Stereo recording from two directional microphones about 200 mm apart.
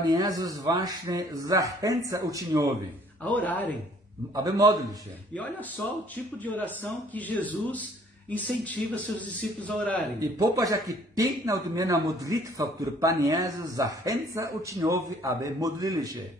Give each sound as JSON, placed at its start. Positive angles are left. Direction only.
{"t": 0.0, "sound": "a man's voice", "side_deg": -20}
{"t": 3.3, "sound": "speech", "side_deg": 10}
{"t": 4.4, "sound": "a man's voice", "side_deg": -20}
{"t": 5.3, "sound": "speech", "side_deg": 5}
{"t": 10.4, "sound": "a man's voice", "side_deg": -15}